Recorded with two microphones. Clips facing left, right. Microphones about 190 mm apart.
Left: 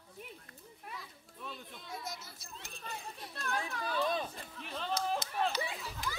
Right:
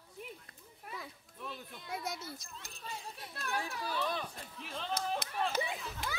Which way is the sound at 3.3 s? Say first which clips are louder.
Even; 5° right (ahead or behind).